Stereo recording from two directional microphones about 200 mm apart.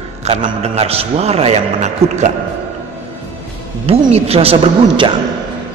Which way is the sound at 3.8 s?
30° right (ahead or behind).